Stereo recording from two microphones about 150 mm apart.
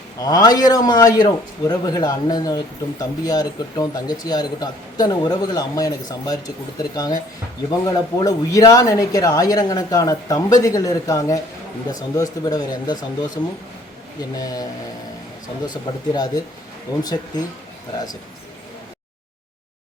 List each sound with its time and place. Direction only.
0.2 s a man's voice: 25° left (ahead or behind)